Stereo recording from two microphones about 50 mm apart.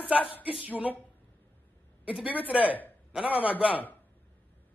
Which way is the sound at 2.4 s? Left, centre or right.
Right.